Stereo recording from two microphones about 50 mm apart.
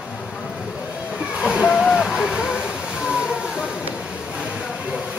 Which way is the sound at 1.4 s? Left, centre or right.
Right.